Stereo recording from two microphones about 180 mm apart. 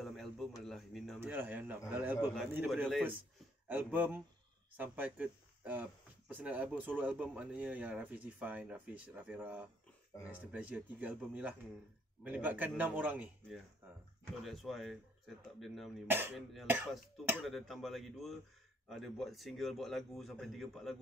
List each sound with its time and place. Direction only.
0.0 s a sound: centre (ahead or behind)
0.6 s a man's voice: centre (ahead or behind)
1.2 s speech: 10° right (ahead or behind)
13.8 s a sound: 10° right (ahead or behind)
14.4 s a man's voice: centre (ahead or behind)
16.6 s speech: 10° right (ahead or behind)
17.5 s a man's voice: centre (ahead or behind)